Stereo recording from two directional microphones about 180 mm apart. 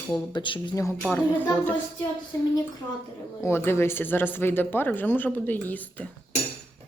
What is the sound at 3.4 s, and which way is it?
Speech, 15° left (ahead or behind).